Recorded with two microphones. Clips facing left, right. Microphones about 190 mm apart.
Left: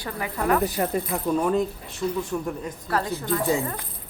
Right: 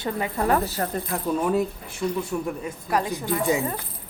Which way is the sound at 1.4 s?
5° right (ahead or behind).